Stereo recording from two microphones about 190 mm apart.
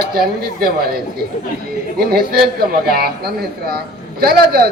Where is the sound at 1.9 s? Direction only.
55° right (ahead or behind).